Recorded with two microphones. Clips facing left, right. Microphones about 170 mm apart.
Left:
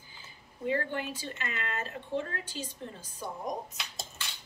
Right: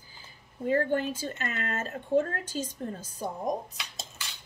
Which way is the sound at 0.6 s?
45° right (ahead or behind).